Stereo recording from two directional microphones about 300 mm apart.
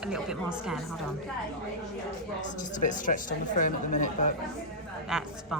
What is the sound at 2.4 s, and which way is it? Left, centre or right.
Speech, left.